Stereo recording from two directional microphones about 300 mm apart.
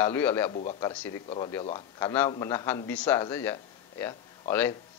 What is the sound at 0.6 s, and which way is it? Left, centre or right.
Speech, centre.